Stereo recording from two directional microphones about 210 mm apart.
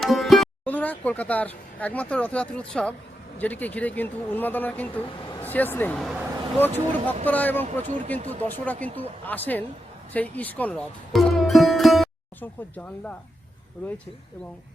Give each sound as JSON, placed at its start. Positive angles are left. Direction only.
{"t": 0.0, "sound": "speech", "side_deg": 0}
{"t": 7.9, "sound": "speech", "side_deg": -35}
{"t": 8.1, "sound": "speech", "side_deg": 10}